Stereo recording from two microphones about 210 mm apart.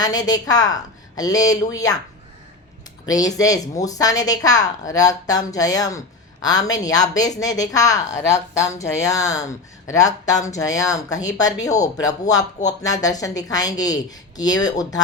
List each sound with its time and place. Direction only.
0.0 s speech: 20° left (ahead or behind)
3.1 s speech: 15° left (ahead or behind)